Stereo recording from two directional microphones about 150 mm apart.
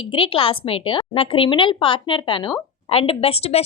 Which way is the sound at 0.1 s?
35° left (ahead or behind).